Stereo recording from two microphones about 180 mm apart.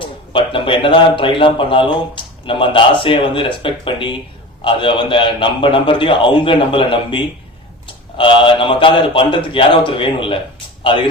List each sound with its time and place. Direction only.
0.0 s a man's voice: 30° left (ahead or behind)